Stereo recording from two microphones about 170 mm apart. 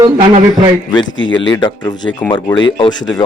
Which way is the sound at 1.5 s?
25° left (ahead or behind).